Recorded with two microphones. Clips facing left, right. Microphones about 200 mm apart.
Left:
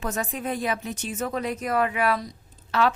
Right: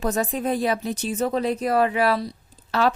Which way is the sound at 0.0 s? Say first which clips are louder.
Right 5 dB; 35° right (ahead or behind).